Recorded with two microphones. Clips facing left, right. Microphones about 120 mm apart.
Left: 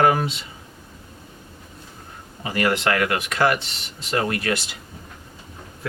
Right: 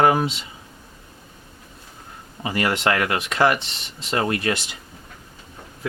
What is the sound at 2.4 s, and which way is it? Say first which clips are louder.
Speech: left 1 dB; 25° right (ahead or behind).